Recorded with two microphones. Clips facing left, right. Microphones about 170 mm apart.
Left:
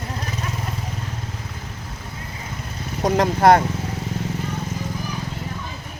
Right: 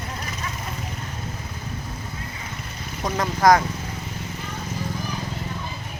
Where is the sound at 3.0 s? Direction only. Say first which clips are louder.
Left 4 dB; 35° left (ahead or behind).